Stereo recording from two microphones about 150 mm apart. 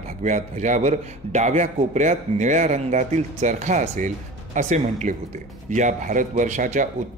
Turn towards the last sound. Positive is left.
turn(degrees=-55)  # may be behind; listen again after turning